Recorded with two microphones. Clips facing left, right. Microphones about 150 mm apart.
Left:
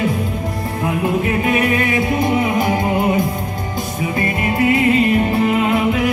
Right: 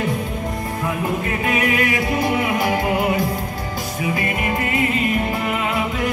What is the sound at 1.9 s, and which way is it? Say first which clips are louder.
Music: left 3 dB; 25° left (ahead or behind).